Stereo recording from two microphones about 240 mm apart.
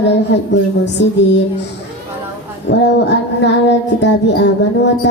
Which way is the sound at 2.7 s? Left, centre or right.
Left.